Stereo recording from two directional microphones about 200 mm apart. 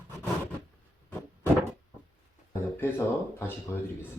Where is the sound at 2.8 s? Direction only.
10° left (ahead or behind).